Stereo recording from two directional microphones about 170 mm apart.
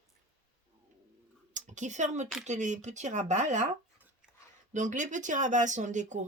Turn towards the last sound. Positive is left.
turn(degrees=-45)  # may be behind; listen again after turning